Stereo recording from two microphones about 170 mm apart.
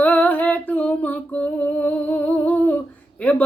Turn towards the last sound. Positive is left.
turn(degrees=10)  # may be behind; listen again after turning